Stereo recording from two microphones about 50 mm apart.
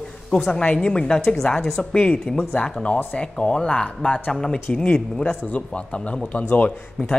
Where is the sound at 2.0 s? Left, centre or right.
Left.